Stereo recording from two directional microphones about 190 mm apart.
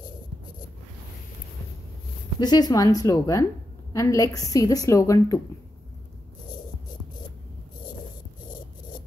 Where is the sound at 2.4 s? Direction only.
20° left (ahead or behind).